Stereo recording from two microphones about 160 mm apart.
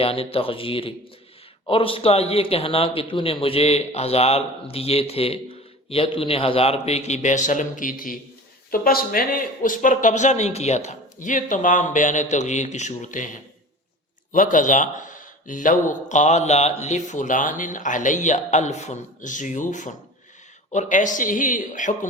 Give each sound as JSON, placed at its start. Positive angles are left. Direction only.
{"t": 0.0, "sound": "speech", "side_deg": 35}
{"t": 14.3, "sound": "speech", "side_deg": 55}